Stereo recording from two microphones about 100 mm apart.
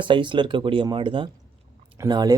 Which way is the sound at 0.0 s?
55° right (ahead or behind).